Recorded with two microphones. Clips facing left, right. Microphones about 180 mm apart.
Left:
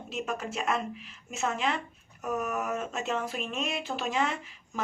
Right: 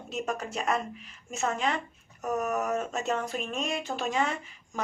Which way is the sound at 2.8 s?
Centre (ahead or behind).